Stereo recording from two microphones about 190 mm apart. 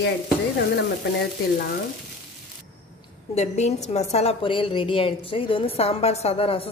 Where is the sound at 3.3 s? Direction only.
35° left (ahead or behind).